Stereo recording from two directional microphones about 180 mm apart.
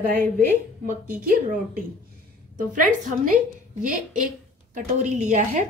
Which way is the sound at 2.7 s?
50° right (ahead or behind).